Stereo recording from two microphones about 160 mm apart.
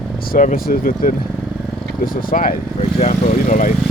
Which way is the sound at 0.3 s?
60° left (ahead or behind).